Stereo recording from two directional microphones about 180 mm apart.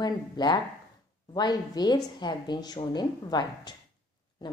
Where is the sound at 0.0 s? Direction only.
25° left (ahead or behind).